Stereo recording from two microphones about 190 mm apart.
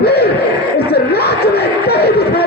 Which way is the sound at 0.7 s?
55° left (ahead or behind).